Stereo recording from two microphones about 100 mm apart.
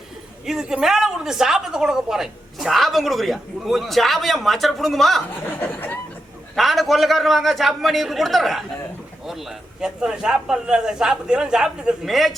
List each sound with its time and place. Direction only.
0.4 s a woman's voice: 5° right (ahead or behind)
5.5 s speech: 20° left (ahead or behind)
6.6 s a woman's voice: centre (ahead or behind)